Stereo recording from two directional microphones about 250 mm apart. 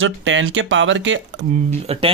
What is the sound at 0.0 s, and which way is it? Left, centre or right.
Speech, right.